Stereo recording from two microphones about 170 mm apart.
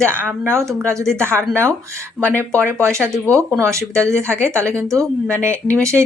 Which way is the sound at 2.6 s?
15° right (ahead or behind).